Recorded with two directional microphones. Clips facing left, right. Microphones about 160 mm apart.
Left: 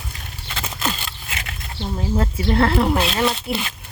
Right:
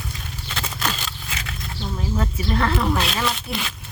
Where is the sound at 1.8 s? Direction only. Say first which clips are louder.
Left 4 dB; 25° left (ahead or behind).